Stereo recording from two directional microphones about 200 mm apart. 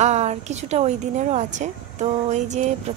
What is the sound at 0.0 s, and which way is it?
Speech, 35° right (ahead or behind).